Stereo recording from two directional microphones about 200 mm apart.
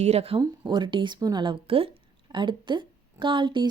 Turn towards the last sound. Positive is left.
turn(degrees=-25)  # may be behind; listen again after turning